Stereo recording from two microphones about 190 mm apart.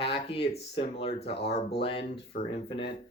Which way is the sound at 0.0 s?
30° left (ahead or behind).